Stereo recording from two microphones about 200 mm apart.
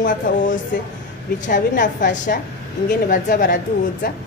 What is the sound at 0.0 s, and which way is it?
A woman's voice, 40° left (ahead or behind).